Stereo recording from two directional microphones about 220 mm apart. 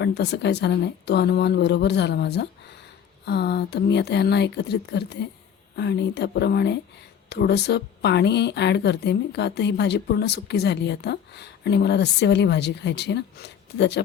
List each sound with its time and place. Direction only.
0.0 s speech: 50° left (ahead or behind)